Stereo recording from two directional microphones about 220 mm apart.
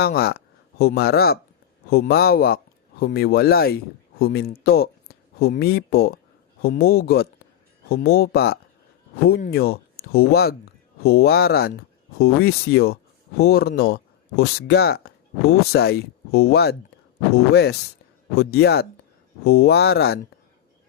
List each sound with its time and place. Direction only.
0.0 s speech: 45° left (ahead or behind)